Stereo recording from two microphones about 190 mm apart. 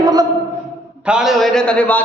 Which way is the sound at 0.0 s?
20° right (ahead or behind).